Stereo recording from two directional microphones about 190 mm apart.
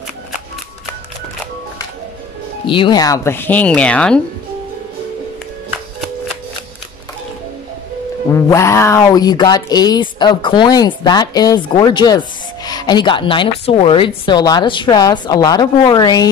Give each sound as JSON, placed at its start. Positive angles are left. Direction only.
{"t": 2.6, "sound": "speech", "side_deg": 25}
{"t": 8.3, "sound": "speech", "side_deg": 15}